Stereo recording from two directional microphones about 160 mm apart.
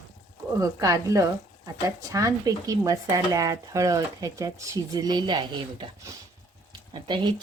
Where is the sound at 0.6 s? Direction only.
20° right (ahead or behind).